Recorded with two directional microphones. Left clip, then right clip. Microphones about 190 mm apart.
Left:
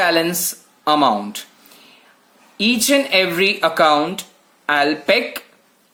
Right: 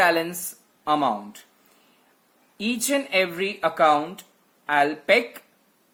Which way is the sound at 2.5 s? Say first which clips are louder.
Left 9 dB; 15° left (ahead or behind).